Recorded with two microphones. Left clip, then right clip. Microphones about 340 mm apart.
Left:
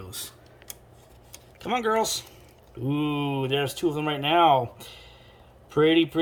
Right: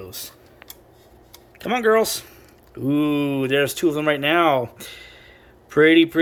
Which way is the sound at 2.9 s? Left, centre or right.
Centre.